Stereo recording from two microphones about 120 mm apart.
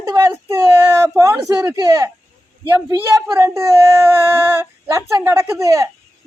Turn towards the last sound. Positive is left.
turn(degrees=-25)  # may be behind; listen again after turning